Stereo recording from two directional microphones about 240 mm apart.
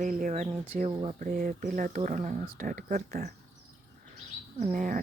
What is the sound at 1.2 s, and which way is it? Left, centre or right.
Speech, right.